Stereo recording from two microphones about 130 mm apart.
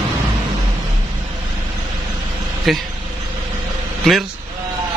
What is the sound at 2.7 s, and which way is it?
Speech, centre (ahead or behind).